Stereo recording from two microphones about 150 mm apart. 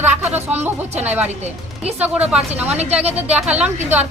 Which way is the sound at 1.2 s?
45° right (ahead or behind).